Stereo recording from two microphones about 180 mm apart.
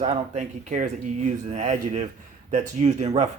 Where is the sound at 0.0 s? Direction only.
40° right (ahead or behind).